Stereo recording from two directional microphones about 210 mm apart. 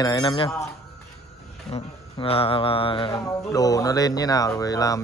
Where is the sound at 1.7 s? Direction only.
30° left (ahead or behind).